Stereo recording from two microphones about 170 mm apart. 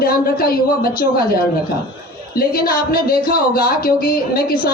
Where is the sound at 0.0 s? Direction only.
60° left (ahead or behind).